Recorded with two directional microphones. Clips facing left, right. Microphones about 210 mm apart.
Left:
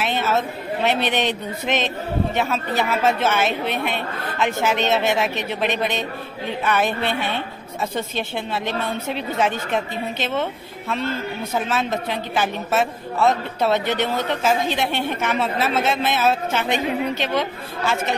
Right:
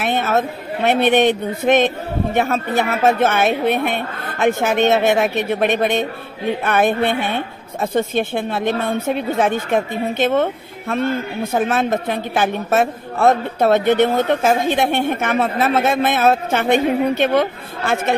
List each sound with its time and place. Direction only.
0.0 s a woman's voice: 55° right (ahead or behind)